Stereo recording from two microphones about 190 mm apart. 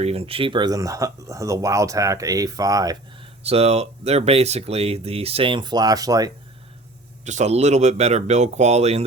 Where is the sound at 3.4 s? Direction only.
35° right (ahead or behind).